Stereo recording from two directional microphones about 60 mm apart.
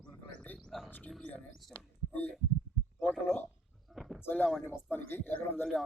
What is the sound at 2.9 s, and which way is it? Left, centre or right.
Speech, left.